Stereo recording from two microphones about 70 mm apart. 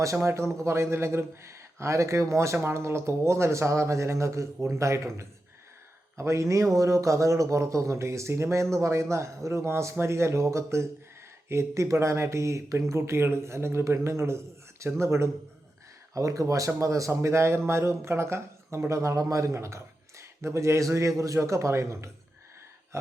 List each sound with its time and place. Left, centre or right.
0.0 s a man's voice: right
16.1 s speech: right